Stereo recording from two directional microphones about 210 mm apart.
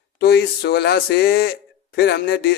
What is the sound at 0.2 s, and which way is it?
Speech, 50° left (ahead or behind).